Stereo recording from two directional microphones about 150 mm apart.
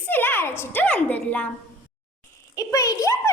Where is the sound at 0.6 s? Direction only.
15° left (ahead or behind).